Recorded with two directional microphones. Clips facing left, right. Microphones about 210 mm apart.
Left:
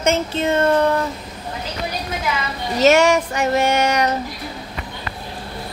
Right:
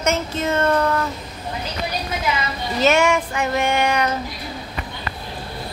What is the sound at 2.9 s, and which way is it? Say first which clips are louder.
Female singing: left 3 dB; 40° left (ahead or behind).